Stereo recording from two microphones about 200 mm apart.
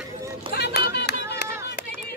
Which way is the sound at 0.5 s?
55° left (ahead or behind).